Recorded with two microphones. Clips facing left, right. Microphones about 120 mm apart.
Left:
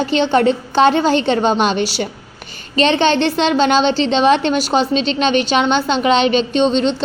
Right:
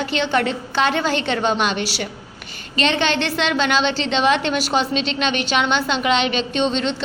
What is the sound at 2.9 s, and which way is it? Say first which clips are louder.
A woman's voice: left 6 dB; 35° left (ahead or behind).